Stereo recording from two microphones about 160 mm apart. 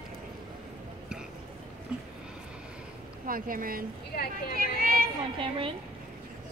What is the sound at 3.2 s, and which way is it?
Speech, 60° right (ahead or behind).